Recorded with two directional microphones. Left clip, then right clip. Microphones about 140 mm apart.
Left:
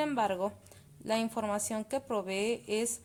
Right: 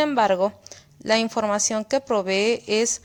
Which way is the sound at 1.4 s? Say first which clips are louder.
Right 11 dB; 25° right (ahead or behind).